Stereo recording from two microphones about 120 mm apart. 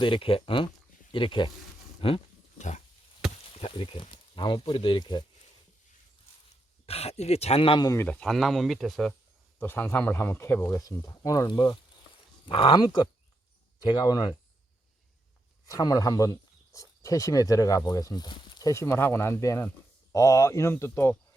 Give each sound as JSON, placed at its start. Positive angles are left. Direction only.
{"t": 0.0, "sound": "speech", "side_deg": 45}
{"t": 2.6, "sound": "a sound", "side_deg": 80}
{"t": 3.4, "sound": "speech", "side_deg": 50}
{"t": 6.8, "sound": "speech", "side_deg": 60}
{"t": 8.0, "sound": "speech", "side_deg": 5}
{"t": 9.6, "sound": "speech", "side_deg": 15}
{"t": 15.6, "sound": "speech", "side_deg": 30}
{"t": 18.7, "sound": "speech", "side_deg": 25}